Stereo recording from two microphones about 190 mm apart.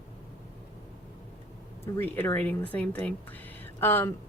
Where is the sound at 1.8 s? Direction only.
10° left (ahead or behind).